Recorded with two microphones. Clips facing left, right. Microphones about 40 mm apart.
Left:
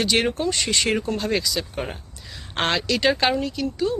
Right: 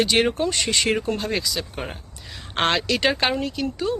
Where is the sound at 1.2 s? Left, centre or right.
Centre.